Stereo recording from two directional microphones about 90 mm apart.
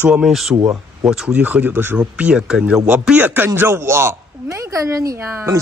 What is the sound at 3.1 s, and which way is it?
A man's voice, 20° right (ahead or behind).